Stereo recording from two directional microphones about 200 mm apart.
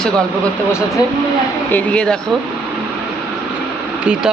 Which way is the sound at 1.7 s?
10° left (ahead or behind).